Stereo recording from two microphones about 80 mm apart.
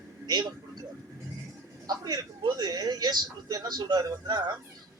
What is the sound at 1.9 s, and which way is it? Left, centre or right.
A man's voice, right.